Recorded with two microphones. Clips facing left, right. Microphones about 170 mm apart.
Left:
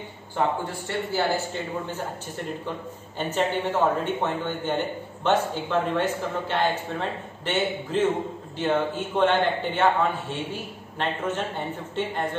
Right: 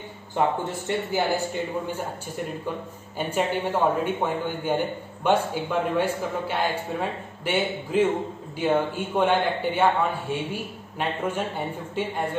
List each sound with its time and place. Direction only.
0.7 s a man's voice: 15° right (ahead or behind)
3.2 s a man's voice: 10° right (ahead or behind)